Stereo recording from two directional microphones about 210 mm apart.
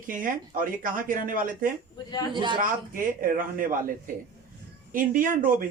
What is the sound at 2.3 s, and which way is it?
Speech, 20° right (ahead or behind).